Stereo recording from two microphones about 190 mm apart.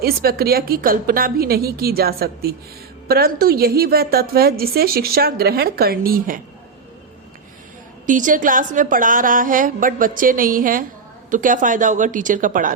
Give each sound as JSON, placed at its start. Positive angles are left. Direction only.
{"t": 0.0, "sound": "a woman's voice", "side_deg": -55}
{"t": 8.0, "sound": "a woman's voice", "side_deg": -45}